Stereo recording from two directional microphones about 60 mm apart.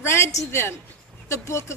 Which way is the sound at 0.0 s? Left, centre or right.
Left.